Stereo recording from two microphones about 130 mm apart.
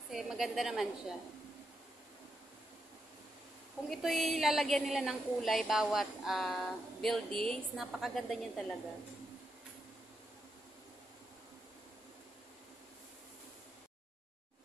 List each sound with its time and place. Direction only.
0.1 s a woman's voice: centre (ahead or behind)
3.9 s a woman's voice: centre (ahead or behind)